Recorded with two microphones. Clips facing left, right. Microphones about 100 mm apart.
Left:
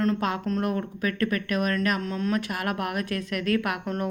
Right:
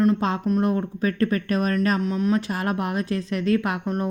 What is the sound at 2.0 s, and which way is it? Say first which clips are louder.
A woman's voice: right 5 dB; 20° right (ahead or behind).